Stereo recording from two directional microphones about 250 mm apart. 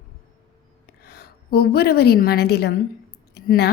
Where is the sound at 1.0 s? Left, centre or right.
Left.